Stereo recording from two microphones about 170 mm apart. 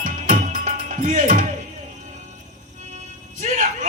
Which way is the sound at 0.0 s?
50° right (ahead or behind).